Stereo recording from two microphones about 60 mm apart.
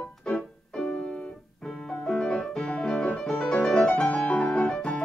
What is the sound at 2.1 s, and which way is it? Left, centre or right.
Music, centre.